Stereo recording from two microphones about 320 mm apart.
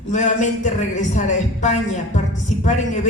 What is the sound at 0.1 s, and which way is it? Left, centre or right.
A man's voice, left.